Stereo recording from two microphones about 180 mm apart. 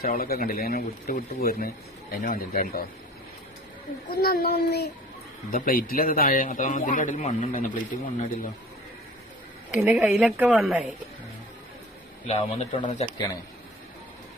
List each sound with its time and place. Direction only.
0.0 s a man's voice: 55° left (ahead or behind)
4.1 s speech: 60° left (ahead or behind)
5.5 s a man's voice: 50° left (ahead or behind)
9.7 s a woman's voice: 5° right (ahead or behind)
12.3 s speech: 35° left (ahead or behind)